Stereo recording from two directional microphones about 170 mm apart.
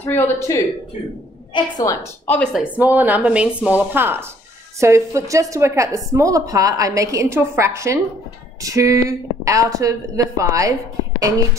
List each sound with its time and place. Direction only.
0.0 s a woman's voice: 15° left (ahead or behind)
2.2 s speech: 5° left (ahead or behind)
2.6 s a woman's voice: 10° right (ahead or behind)